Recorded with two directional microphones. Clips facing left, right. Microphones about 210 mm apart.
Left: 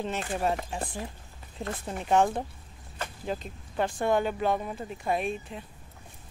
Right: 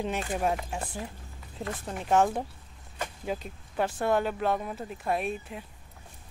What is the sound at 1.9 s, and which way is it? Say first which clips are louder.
Speech: even; centre (ahead or behind).